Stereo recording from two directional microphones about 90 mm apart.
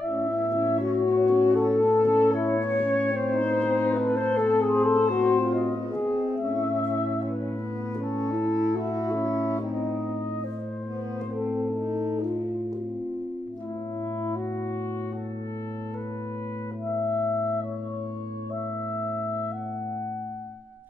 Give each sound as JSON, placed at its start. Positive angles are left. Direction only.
{"t": 0.6, "sound": "music", "side_deg": 20}
{"t": 11.8, "sound": "music", "side_deg": -45}
{"t": 17.0, "sound": "music", "side_deg": 30}
{"t": 18.9, "sound": "music", "side_deg": 25}